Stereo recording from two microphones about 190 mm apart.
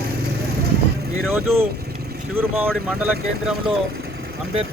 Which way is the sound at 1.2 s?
10° right (ahead or behind).